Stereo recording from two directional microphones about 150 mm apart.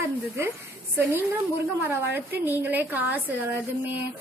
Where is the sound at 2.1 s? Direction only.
15° right (ahead or behind).